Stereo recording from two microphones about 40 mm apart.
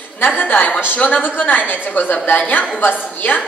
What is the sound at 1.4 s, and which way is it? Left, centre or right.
A woman's voice, left.